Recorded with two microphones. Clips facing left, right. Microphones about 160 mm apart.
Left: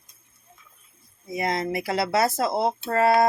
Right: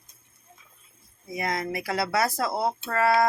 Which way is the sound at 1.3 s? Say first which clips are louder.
Left 3 dB; 25° left (ahead or behind).